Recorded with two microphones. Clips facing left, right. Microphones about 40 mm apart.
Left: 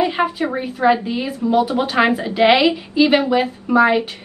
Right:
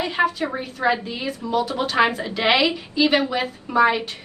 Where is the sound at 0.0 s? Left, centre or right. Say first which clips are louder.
Left 3 dB; centre.